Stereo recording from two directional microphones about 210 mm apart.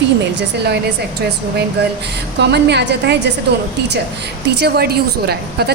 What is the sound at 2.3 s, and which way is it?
Speech, 55° right (ahead or behind).